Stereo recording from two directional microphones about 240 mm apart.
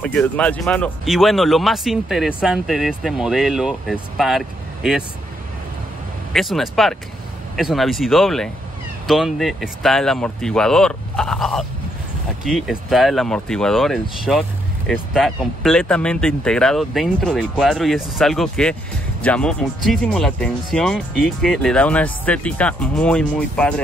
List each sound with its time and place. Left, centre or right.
0.0 s speech: centre
6.3 s speech: centre